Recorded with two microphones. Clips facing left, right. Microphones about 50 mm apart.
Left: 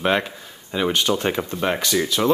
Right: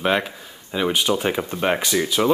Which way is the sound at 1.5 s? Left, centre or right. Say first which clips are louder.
Right 1 dB; centre.